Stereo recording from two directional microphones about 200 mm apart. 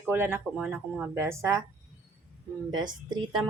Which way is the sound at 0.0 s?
10° right (ahead or behind).